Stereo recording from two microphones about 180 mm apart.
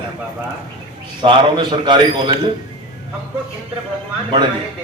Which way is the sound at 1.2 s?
25° right (ahead or behind).